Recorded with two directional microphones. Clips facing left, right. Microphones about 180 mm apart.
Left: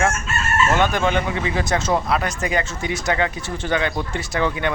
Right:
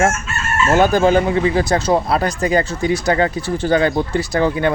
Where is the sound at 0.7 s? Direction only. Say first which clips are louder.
Right 9 dB; 35° right (ahead or behind).